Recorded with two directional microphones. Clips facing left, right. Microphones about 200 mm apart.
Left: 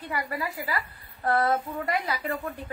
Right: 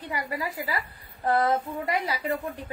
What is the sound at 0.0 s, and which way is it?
A woman's voice, 15° right (ahead or behind).